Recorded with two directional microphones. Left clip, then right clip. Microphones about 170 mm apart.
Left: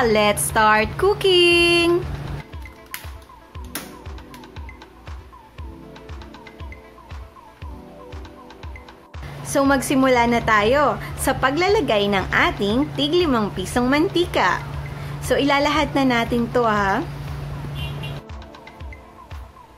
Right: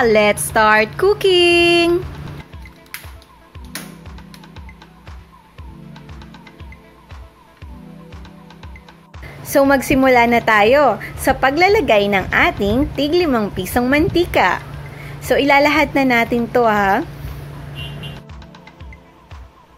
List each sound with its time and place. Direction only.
0.0 s a woman's voice: 20° right (ahead or behind)
9.4 s a woman's voice: 25° right (ahead or behind)